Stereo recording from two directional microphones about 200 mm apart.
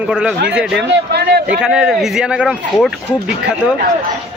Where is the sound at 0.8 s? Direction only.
55° right (ahead or behind).